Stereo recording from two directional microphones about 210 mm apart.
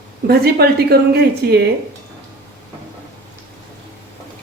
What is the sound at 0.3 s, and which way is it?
A woman's voice, 50° right (ahead or behind).